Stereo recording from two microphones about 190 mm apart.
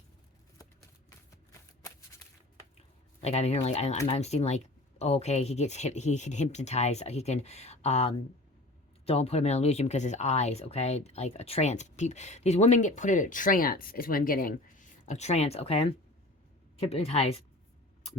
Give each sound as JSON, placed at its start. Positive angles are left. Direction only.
{"t": 3.2, "sound": "speech", "side_deg": 35}